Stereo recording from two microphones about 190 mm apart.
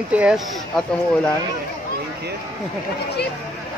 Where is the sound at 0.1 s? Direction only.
5° right (ahead or behind).